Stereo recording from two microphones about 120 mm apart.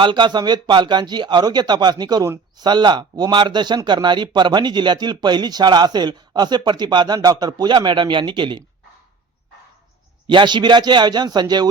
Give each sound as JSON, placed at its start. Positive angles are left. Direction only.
{"t": 0.0, "sound": "speech", "side_deg": -40}
{"t": 10.2, "sound": "speech", "side_deg": -40}